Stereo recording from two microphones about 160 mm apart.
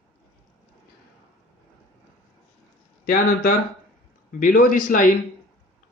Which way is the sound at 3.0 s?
65° left (ahead or behind).